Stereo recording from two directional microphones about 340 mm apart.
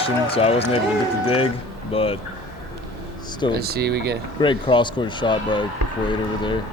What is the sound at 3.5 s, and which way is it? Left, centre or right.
Speech, right.